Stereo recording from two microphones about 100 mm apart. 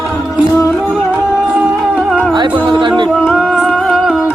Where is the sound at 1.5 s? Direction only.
10° right (ahead or behind).